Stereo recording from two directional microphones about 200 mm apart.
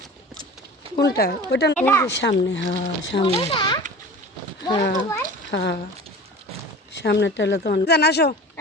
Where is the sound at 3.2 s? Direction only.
25° left (ahead or behind).